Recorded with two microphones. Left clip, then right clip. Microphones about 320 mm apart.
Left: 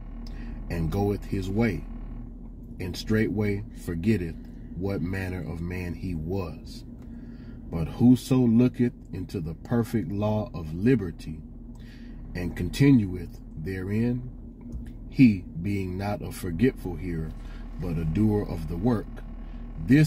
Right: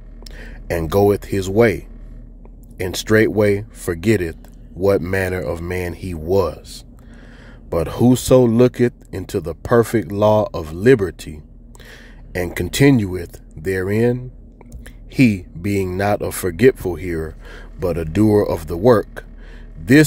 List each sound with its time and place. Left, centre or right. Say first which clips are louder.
0.7 s speech: right 14 dB; right
2.8 s speech: right 13 dB; right
7.7 s speech: right 7 dB; right
12.4 s speech: right 11 dB; right
15.3 s speech: right 10 dB; right
15.8 s speech: right 17 dB; right
18.1 s speech: right 12 dB; right